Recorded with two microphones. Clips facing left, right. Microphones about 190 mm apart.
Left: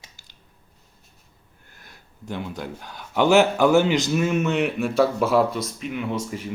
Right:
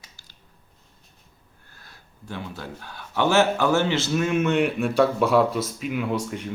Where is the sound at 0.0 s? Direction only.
20° left (ahead or behind).